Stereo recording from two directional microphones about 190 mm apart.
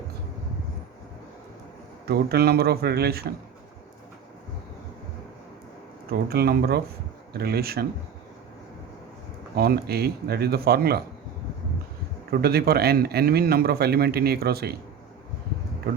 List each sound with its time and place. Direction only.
2.0 s a man's voice: 55° right (ahead or behind)
6.1 s a man's voice: 55° right (ahead or behind)
9.6 s a man's voice: 55° right (ahead or behind)
12.3 s a man's voice: 55° right (ahead or behind)